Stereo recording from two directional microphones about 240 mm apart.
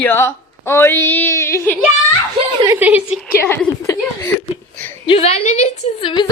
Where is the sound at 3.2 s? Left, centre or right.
Centre.